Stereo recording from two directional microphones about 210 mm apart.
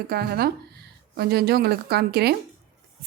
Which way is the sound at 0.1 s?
50° right (ahead or behind).